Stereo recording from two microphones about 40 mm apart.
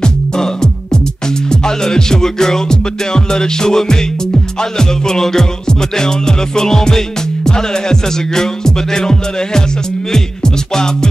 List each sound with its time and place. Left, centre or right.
0.0 s music: centre